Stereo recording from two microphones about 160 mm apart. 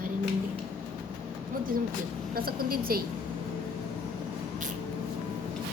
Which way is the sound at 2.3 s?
70° right (ahead or behind).